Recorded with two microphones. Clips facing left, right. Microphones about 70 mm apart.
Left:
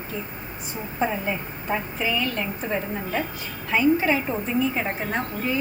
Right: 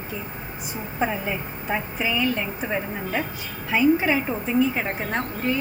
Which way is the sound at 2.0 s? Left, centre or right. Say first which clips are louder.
Right 4 dB; centre.